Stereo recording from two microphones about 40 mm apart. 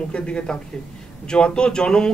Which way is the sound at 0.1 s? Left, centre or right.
Left.